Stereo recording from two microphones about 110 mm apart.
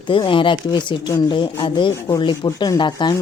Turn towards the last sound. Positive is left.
turn(degrees=45)  # may be behind; listen again after turning